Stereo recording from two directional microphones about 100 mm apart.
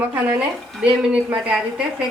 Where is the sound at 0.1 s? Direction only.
15° right (ahead or behind).